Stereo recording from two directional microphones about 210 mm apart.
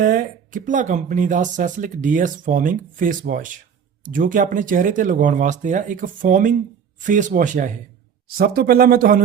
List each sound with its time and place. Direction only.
0.0 s speech: 40° right (ahead or behind)